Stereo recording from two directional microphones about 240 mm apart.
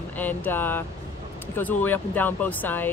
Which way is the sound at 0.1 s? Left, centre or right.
Centre.